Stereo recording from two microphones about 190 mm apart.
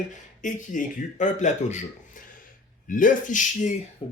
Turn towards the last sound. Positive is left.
turn(degrees=30)  # may be behind; listen again after turning